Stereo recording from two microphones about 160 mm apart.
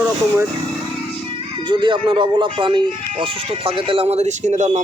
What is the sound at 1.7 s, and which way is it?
Speech, 30° right (ahead or behind).